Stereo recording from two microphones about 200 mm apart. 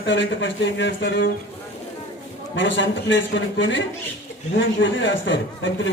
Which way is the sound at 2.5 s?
70° left (ahead or behind).